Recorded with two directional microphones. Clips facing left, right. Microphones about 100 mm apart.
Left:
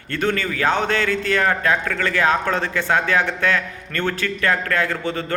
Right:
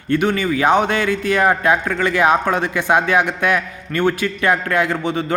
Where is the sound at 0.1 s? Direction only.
15° right (ahead or behind).